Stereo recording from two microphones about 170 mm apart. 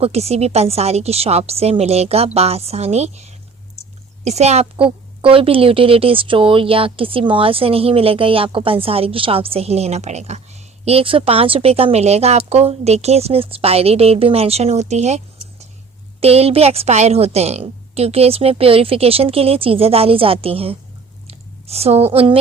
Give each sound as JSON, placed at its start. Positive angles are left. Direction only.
{"t": 0.0, "sound": "a child's voice", "side_deg": -35}
{"t": 16.2, "sound": "speech", "side_deg": -35}
{"t": 21.2, "sound": "chewing", "side_deg": -35}